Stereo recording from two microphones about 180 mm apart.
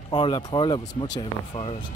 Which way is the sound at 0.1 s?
25° left (ahead or behind).